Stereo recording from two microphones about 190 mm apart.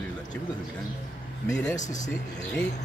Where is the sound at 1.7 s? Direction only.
40° left (ahead or behind).